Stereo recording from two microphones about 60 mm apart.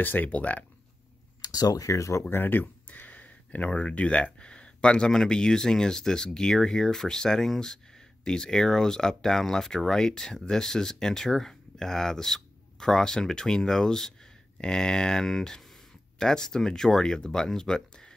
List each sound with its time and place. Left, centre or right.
0.0 s speech: left
1.5 s speech: left
2.2 s speech: left; by 18.1 s centre